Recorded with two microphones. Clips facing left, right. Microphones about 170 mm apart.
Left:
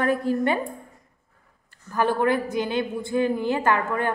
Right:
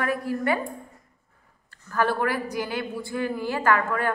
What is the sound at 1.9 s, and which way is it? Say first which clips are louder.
A woman's voice: left 3 dB; 15° left (ahead or behind).